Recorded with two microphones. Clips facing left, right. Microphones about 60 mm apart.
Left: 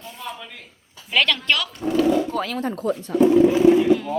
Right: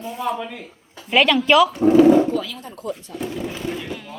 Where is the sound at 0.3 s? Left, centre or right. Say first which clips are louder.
Right 9 dB; right.